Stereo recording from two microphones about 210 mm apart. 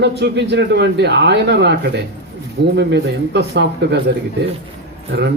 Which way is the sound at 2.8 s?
55° right (ahead or behind).